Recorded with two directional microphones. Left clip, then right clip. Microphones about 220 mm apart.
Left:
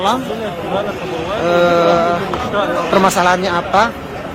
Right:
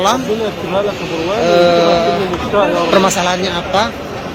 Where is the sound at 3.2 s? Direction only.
20° left (ahead or behind).